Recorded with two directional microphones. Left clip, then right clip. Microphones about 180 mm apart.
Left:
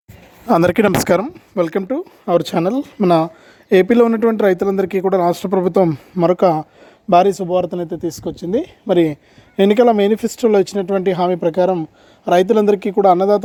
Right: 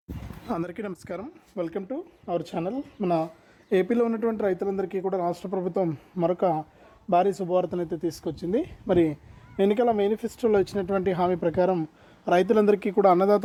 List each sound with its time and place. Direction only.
0.4 s speech: 55° left (ahead or behind)
3.7 s speech: 40° left (ahead or behind)
9.6 s speech: 55° left (ahead or behind); by 13.4 s 25° left (ahead or behind)